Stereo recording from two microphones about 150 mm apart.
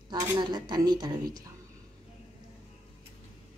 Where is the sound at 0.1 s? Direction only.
30° right (ahead or behind).